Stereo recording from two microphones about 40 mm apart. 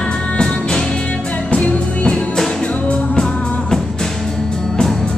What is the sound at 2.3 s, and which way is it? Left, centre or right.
Music, centre.